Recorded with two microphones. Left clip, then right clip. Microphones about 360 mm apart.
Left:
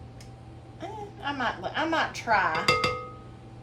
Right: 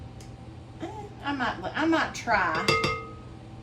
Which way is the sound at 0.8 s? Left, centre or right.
Centre.